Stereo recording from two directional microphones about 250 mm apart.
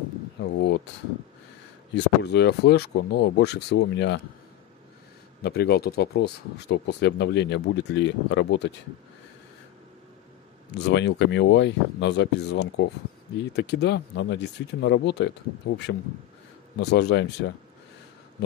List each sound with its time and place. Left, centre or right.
0.4 s a sound: left
2.0 s speech: left
5.4 s speech: left
10.7 s speech: left
16.7 s speech: left